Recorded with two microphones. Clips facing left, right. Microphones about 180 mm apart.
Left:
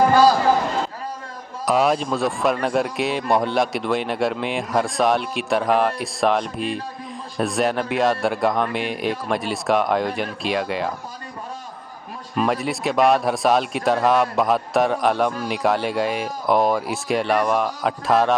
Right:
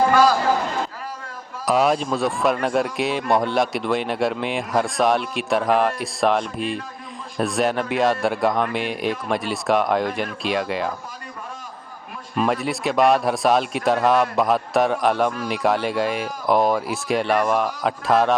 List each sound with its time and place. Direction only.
0.1 s a sound: 30° left (ahead or behind)
1.6 s speech: centre (ahead or behind)
12.4 s speech: centre (ahead or behind)